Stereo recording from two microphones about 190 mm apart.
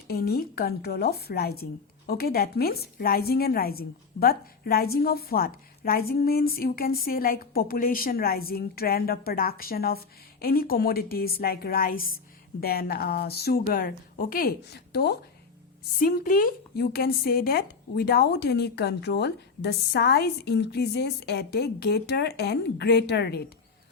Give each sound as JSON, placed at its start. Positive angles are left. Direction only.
{"t": 0.1, "sound": "a woman's voice", "side_deg": 55}